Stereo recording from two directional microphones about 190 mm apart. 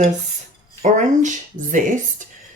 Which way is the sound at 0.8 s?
40° right (ahead or behind).